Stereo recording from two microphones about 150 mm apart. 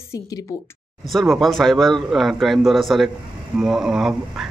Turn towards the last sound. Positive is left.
turn(degrees=-5)  # may be behind; listen again after turning